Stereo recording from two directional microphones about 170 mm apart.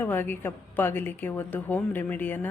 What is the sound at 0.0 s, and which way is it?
A woman's voice, 10° left (ahead or behind).